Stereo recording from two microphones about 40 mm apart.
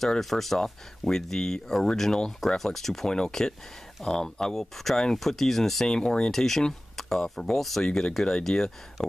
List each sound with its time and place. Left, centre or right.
0.2 s speech: centre